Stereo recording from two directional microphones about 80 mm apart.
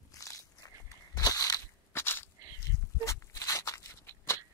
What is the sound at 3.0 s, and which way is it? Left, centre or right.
Walk, left.